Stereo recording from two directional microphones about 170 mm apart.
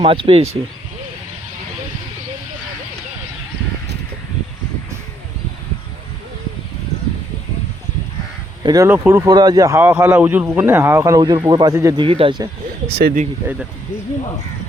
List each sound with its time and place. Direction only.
0.0 s speech: 30° right (ahead or behind)
8.6 s speech: 20° right (ahead or behind)
12.0 s speech: 30° right (ahead or behind)
13.0 s speech: 60° right (ahead or behind)